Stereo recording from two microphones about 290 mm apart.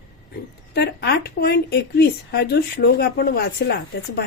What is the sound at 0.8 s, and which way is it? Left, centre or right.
Speech, left.